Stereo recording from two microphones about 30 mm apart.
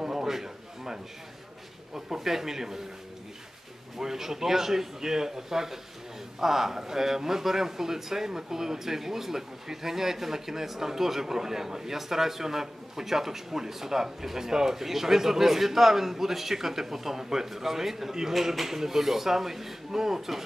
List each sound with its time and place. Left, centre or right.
0.0 s a sound: centre
2.0 s a man's voice: centre
4.0 s a man's voice: centre